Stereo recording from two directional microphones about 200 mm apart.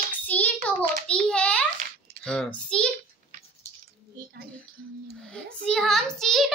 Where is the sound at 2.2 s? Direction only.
5° left (ahead or behind).